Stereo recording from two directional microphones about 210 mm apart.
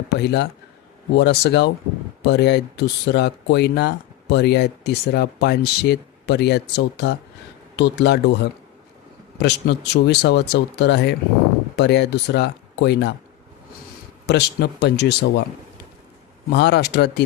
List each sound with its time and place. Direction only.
0.1 s speech: 55° left (ahead or behind)
14.3 s speech: 55° left (ahead or behind)
16.5 s speech: 55° left (ahead or behind)